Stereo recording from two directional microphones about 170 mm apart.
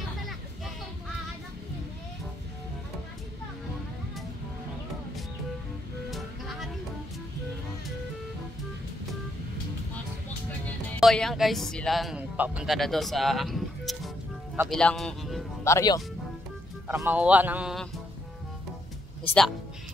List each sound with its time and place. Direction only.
6.0 s music: centre (ahead or behind)
11.0 s speech: centre (ahead or behind)
15.6 s speech: 20° left (ahead or behind)
16.8 s speech: 10° right (ahead or behind)
19.2 s speech: 5° left (ahead or behind)